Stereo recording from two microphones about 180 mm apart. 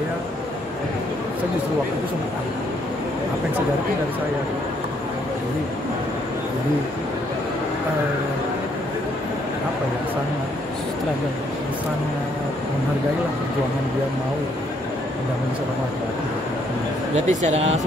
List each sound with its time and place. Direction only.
17.3 s speech: 40° right (ahead or behind)